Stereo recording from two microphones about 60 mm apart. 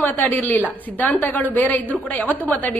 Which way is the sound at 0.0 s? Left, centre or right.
Left.